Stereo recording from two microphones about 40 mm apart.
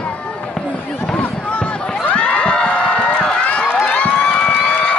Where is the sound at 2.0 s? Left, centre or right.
Left.